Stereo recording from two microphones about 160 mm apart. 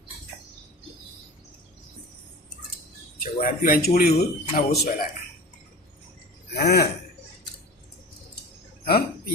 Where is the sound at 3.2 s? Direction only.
60° left (ahead or behind); by 4.9 s 80° left.